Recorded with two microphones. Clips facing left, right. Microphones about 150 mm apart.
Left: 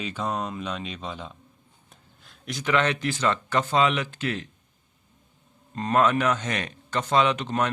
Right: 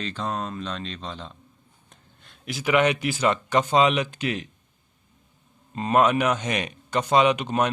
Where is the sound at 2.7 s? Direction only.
15° right (ahead or behind).